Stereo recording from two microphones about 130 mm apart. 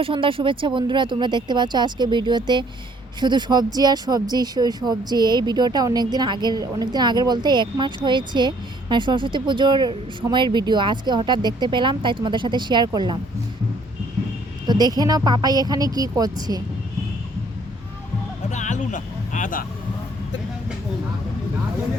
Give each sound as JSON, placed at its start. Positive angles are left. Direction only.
{"t": 0.0, "sound": "speech", "side_deg": -45}
{"t": 14.7, "sound": "speech", "side_deg": -30}
{"t": 18.5, "sound": "a sound", "side_deg": 70}